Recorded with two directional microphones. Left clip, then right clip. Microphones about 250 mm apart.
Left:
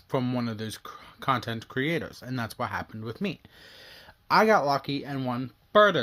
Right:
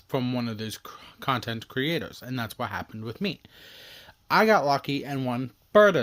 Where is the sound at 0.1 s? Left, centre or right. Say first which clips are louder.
Even; centre.